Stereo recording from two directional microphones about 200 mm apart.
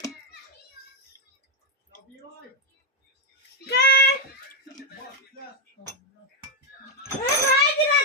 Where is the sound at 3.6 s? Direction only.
55° left (ahead or behind).